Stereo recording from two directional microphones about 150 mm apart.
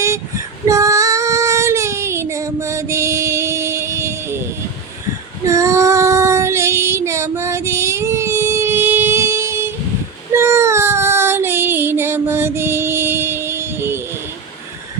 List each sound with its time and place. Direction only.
0.7 s female singing: 20° right (ahead or behind)
5.5 s child singing: 20° right (ahead or behind)